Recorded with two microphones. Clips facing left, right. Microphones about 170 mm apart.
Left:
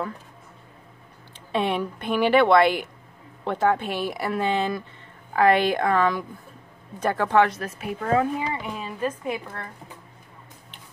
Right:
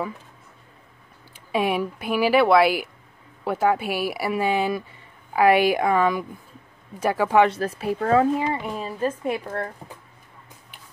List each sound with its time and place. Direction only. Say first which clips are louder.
1.3 s speech: right 2 dB; 10° right (ahead or behind)
7.4 s speech: right 5 dB; 30° right (ahead or behind)